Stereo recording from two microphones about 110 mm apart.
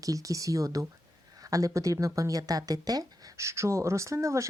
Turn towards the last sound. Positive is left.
turn(degrees=-25)  # may be behind; listen again after turning